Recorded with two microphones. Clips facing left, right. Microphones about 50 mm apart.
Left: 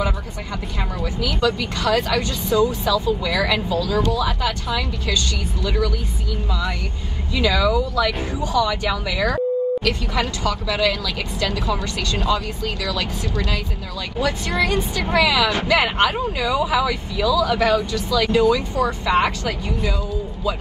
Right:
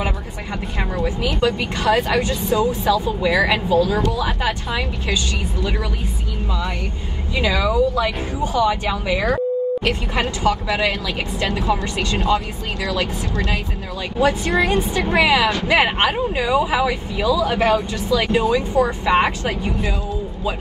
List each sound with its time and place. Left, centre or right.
0.9 s speech: right
7.3 s speech: right